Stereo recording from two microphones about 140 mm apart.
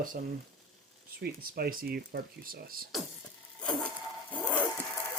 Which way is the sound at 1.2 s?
90° right.